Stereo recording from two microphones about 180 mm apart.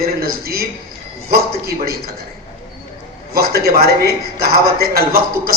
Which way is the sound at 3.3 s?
60° right (ahead or behind).